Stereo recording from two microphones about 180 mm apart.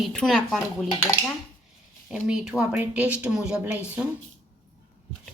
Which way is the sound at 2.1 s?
5° right (ahead or behind).